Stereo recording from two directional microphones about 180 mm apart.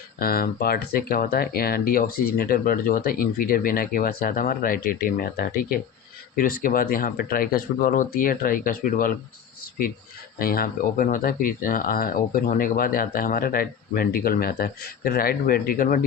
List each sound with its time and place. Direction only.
0.2 s speech: 55° left (ahead or behind)
10.3 s speech: 55° left (ahead or behind)